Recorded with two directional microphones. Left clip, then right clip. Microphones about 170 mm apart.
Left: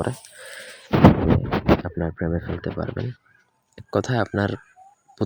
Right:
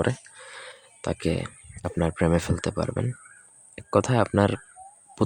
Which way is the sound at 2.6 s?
15° right (ahead or behind).